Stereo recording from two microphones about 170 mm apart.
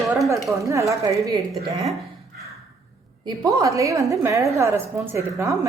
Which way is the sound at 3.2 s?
20° right (ahead or behind).